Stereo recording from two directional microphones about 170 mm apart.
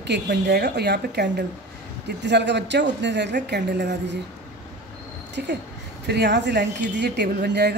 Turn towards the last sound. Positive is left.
turn(degrees=-75)  # may be behind; listen again after turning